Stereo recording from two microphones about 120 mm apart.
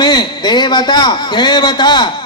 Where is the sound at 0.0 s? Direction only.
40° left (ahead or behind).